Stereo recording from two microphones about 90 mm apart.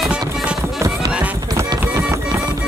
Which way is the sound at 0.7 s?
35° right (ahead or behind).